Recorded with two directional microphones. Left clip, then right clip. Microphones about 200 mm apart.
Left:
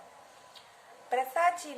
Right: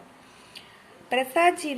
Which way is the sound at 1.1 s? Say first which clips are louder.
Right 6 dB; 25° right (ahead or behind).